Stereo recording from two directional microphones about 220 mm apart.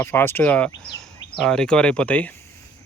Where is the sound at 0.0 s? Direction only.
10° left (ahead or behind).